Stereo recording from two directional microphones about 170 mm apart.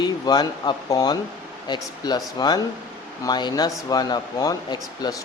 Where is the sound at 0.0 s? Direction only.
25° left (ahead or behind).